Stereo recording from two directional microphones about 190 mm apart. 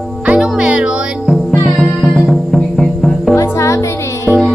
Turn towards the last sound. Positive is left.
turn(degrees=0)  # may be behind; listen again after turning